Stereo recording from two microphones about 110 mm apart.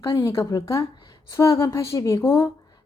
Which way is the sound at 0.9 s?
40° left (ahead or behind).